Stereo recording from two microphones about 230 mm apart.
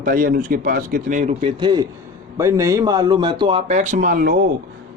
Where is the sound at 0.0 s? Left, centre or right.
Right.